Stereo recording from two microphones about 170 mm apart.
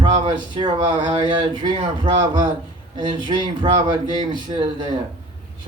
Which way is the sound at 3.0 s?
25° right (ahead or behind).